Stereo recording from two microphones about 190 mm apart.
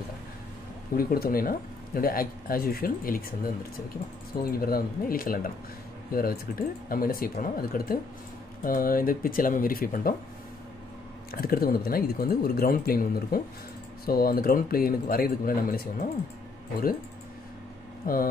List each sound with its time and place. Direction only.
0.9 s speech: 50° left (ahead or behind)
11.3 s speech: 50° left (ahead or behind)
18.1 s speech: 50° left (ahead or behind)